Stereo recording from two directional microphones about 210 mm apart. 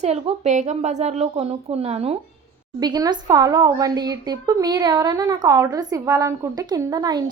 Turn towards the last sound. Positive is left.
turn(degrees=-20)  # may be behind; listen again after turning